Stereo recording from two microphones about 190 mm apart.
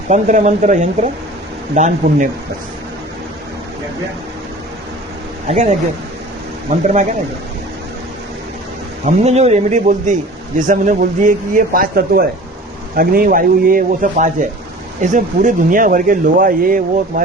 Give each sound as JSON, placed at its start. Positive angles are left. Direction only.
{"t": 0.1, "sound": "speech", "side_deg": -40}
{"t": 5.5, "sound": "speech", "side_deg": -35}
{"t": 6.8, "sound": "speech", "side_deg": -40}
{"t": 9.0, "sound": "speech", "side_deg": -35}